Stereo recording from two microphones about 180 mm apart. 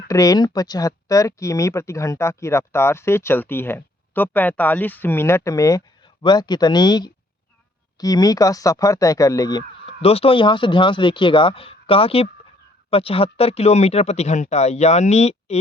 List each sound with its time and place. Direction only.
0.1 s speech: 20° left (ahead or behind); by 15.6 s 35° left (ahead or behind)